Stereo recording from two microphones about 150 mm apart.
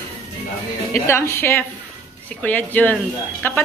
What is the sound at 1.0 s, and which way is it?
Speech, 15° left (ahead or behind).